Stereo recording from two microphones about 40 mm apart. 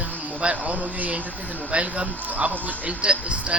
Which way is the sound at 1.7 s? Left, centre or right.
Right.